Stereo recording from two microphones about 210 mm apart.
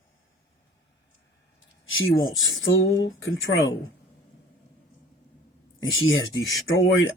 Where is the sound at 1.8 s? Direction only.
70° left (ahead or behind).